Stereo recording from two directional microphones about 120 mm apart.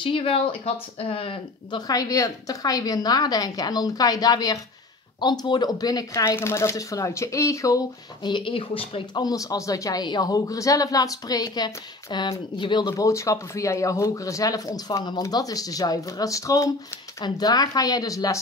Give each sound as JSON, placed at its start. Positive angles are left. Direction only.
{"t": 0.0, "sound": "speech", "side_deg": 50}
{"t": 1.8, "sound": "speech", "side_deg": 30}
{"t": 9.2, "sound": "speech", "side_deg": 30}
{"t": 12.9, "sound": "speech", "side_deg": 25}